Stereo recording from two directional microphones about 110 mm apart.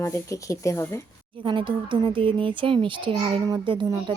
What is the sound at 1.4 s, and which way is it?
A child's voice, 50° right (ahead or behind).